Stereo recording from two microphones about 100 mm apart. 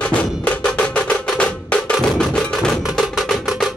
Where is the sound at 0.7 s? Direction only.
10° left (ahead or behind).